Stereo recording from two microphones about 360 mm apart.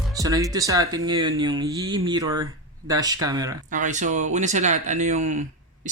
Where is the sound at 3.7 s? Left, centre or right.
Right.